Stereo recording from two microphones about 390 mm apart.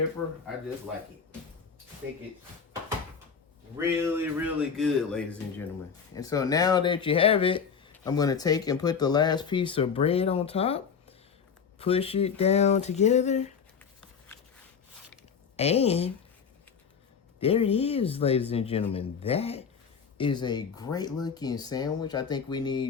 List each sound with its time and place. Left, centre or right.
3.8 s speech: centre
15.5 s speech: centre
17.4 s speech: centre